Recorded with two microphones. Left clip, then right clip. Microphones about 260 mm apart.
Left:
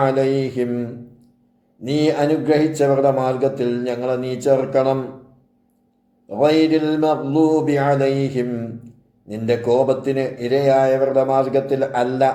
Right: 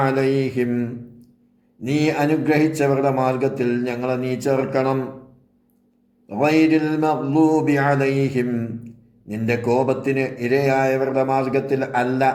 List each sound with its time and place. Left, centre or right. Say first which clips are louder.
0.0 s mantra: left 2 dB; right
6.2 s mantra: left 2 dB; right